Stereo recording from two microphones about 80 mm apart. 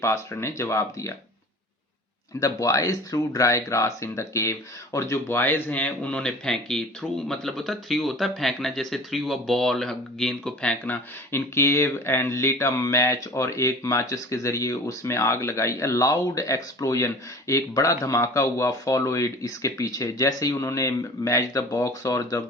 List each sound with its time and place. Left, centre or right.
0.0 s speech: left
2.4 s speech: left; by 10.9 s centre
11.3 s speech: left